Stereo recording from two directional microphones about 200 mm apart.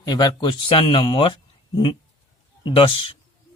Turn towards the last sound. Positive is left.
turn(degrees=30)  # may be behind; listen again after turning